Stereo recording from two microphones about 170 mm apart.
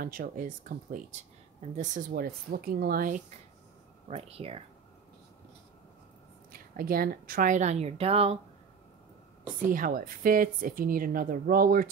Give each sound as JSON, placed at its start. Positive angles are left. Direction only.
{"t": 0.0, "sound": "a woman's voice", "side_deg": -55}
{"t": 4.1, "sound": "speech", "side_deg": -35}
{"t": 6.5, "sound": "speech", "side_deg": -60}
{"t": 9.6, "sound": "a woman's voice", "side_deg": -55}